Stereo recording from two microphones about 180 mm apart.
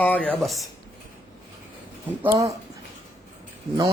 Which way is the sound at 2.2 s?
20° right (ahead or behind).